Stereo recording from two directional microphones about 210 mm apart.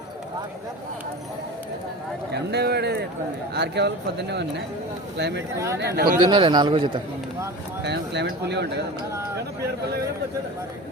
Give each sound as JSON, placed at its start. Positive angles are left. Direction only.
{"t": 2.3, "sound": "speech", "side_deg": -50}
{"t": 5.5, "sound": "speech", "side_deg": -15}
{"t": 5.8, "sound": "speech", "side_deg": -45}
{"t": 6.1, "sound": "a man's voice", "side_deg": -20}
{"t": 7.9, "sound": "speech", "side_deg": -55}